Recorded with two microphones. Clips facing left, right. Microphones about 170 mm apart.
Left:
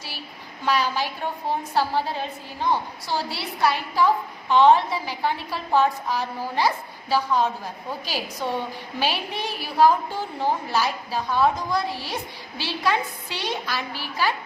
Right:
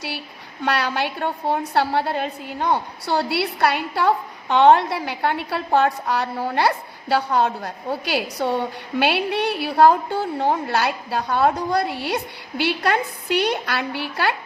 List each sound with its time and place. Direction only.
0.6 s a woman's voice: 65° right (ahead or behind)